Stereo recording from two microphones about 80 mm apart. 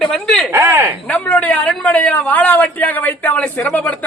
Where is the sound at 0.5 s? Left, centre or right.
Right.